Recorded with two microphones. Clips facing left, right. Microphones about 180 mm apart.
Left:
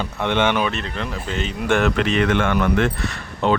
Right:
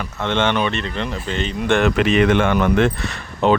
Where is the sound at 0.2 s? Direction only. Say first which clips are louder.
Even; 10° left (ahead or behind).